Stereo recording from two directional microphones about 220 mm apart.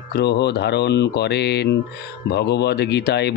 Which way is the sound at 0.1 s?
50° left (ahead or behind).